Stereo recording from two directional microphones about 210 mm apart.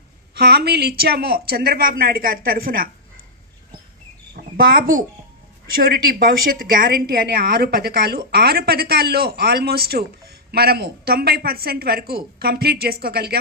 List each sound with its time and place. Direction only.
0.3 s a woman's voice: 50° right (ahead or behind)
4.4 s a woman's voice: 45° right (ahead or behind)